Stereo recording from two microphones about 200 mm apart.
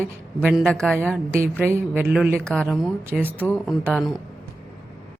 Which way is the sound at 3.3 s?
5° left (ahead or behind).